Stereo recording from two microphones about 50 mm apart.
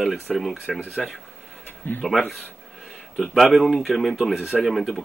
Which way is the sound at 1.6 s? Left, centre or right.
Left.